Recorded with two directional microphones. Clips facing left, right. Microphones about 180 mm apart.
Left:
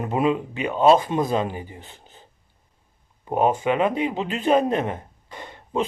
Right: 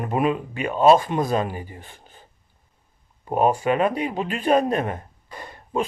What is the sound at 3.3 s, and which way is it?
A man's voice, 20° left (ahead or behind).